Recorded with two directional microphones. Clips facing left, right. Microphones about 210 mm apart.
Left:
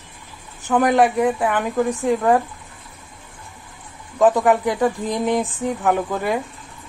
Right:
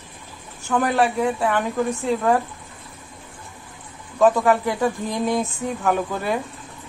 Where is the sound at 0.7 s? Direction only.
15° left (ahead or behind).